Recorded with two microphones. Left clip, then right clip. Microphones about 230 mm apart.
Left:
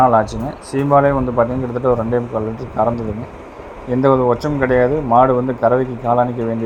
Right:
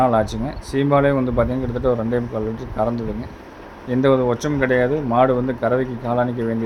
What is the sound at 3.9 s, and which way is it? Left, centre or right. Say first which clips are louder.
Speech: left 3 dB; centre.